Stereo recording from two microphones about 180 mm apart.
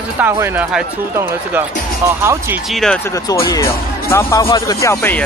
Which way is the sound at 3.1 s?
15° left (ahead or behind).